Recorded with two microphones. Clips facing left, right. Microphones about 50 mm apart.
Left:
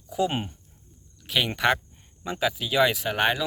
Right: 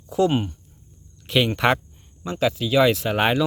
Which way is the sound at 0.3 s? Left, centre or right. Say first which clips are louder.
Right 7 dB; centre.